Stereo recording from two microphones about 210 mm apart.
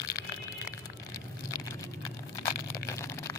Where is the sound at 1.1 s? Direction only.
15° left (ahead or behind).